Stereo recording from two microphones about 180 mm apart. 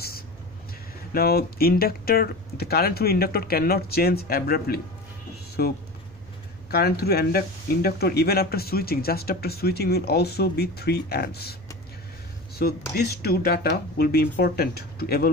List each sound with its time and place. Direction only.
1.1 s speech: 60° left (ahead or behind)
12.6 s speech: 60° left (ahead or behind)